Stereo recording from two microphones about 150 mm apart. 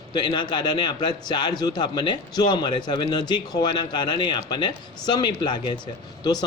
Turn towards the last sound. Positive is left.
turn(degrees=30)  # may be behind; listen again after turning